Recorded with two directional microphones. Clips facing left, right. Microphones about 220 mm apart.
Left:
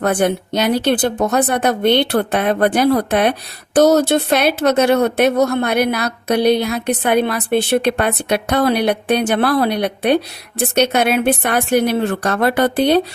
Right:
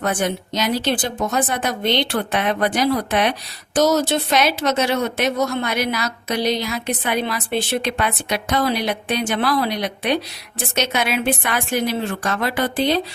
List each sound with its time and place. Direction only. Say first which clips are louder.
0.0 s speech: left 6 dB; 55° left (ahead or behind)